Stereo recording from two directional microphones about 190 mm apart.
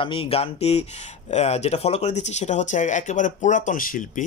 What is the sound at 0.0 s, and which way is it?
Speech, 30° left (ahead or behind).